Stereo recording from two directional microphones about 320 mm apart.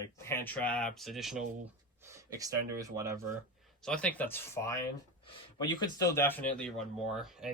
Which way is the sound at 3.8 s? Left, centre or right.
Centre.